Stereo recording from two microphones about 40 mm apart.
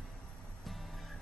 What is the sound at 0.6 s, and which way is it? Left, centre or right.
Music, centre.